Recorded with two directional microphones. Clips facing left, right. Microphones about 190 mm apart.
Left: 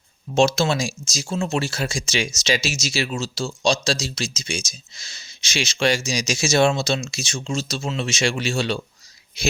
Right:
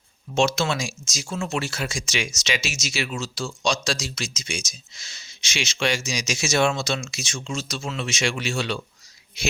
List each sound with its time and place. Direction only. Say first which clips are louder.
0.3 s speech: left 4 dB; 30° left (ahead or behind)